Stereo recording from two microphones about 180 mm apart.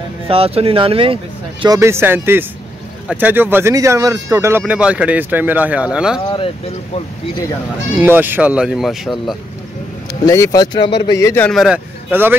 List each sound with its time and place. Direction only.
0.3 s speech: 30° right (ahead or behind)
1.8 s speech: 15° right (ahead or behind)
6.2 s speech: 30° left (ahead or behind)
8.0 s speech: 10° right (ahead or behind)
10.2 s speech: 20° left (ahead or behind)
11.1 s a man's voice: 15° left (ahead or behind)
11.4 s a man's voice: centre (ahead or behind)